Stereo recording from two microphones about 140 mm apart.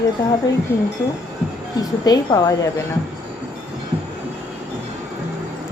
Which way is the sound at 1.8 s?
25° left (ahead or behind).